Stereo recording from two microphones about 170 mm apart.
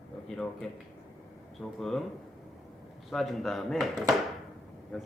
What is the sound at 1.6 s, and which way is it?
Speech, centre (ahead or behind).